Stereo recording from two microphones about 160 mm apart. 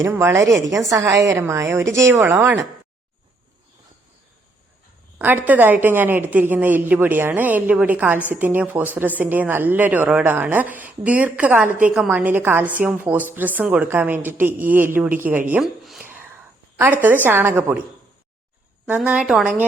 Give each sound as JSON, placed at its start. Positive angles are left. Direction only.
{"t": 0.1, "sound": "a woman's voice", "side_deg": -15}
{"t": 5.1, "sound": "a woman's voice", "side_deg": -10}
{"t": 16.0, "sound": "a sound", "side_deg": -10}
{"t": 17.2, "sound": "a woman's voice", "side_deg": -15}
{"t": 18.9, "sound": "a woman's voice", "side_deg": -5}